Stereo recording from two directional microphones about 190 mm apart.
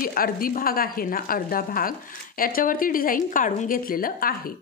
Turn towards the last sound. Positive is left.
turn(degrees=50)  # may be behind; listen again after turning